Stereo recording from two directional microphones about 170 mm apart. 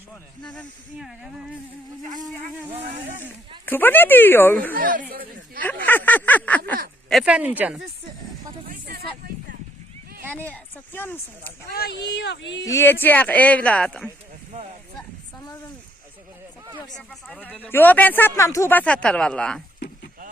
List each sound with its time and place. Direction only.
0.9 s speech: 5° right (ahead or behind)
3.7 s speech: 10° left (ahead or behind)
4.7 s speech: 55° right (ahead or behind)
5.8 s speech: 10° left (ahead or behind)
7.1 s speech: 5° right (ahead or behind)
8.9 s music: 60° right (ahead or behind)
10.5 s speech: 10° left (ahead or behind)
11.7 s speech: 70° left (ahead or behind)
12.6 s speech: 15° left (ahead or behind)
16.9 s speech: 5° left (ahead or behind)